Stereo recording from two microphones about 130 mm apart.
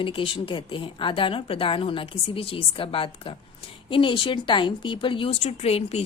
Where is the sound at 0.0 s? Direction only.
40° left (ahead or behind).